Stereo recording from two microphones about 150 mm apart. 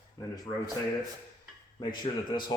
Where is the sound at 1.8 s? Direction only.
30° left (ahead or behind).